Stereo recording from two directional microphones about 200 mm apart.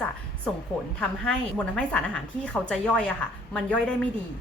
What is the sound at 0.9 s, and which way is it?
A woman's voice, 5° left (ahead or behind).